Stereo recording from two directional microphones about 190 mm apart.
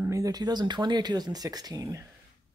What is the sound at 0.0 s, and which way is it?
Speech, 15° right (ahead or behind).